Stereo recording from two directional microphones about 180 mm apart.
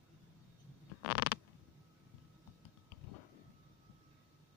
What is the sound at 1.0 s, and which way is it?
Patter, 60° left (ahead or behind).